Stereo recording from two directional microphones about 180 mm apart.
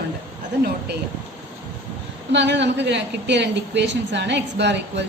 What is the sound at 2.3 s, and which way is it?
A man's voice, 75° right (ahead or behind).